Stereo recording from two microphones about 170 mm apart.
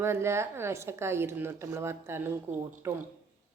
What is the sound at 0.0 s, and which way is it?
A woman's voice, 15° right (ahead or behind).